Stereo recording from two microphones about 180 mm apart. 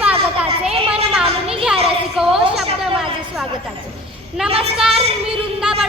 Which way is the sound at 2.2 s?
5° right (ahead or behind).